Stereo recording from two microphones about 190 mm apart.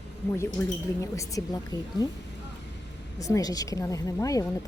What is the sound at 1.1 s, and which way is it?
Speech, 15° left (ahead or behind).